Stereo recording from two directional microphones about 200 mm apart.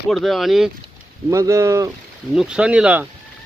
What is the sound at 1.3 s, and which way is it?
Speech, 15° right (ahead or behind).